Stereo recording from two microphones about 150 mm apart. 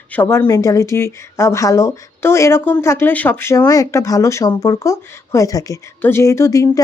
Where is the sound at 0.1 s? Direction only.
15° left (ahead or behind).